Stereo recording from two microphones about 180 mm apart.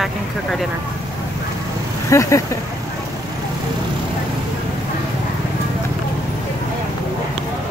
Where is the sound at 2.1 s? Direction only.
15° left (ahead or behind).